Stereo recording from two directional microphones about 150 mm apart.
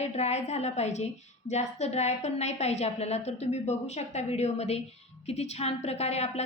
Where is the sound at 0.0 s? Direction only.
45° left (ahead or behind).